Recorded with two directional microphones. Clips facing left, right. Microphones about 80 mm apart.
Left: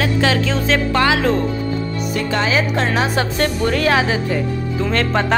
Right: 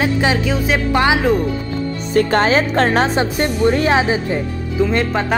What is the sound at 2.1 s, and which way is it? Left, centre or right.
Speech, right.